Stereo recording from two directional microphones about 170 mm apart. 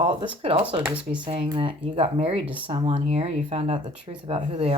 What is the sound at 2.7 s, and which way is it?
Speech, 35° right (ahead or behind).